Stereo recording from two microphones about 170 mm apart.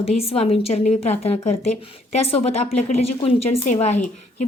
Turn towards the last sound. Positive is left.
turn(degrees=40)  # may be behind; listen again after turning